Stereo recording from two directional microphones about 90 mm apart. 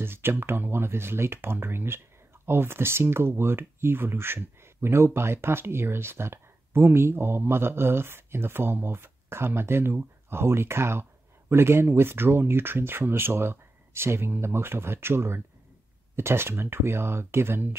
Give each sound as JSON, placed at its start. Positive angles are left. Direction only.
{"t": 0.0, "sound": "speech", "side_deg": -25}